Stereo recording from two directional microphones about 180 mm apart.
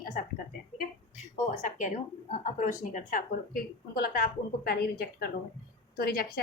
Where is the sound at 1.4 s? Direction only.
45° left (ahead or behind).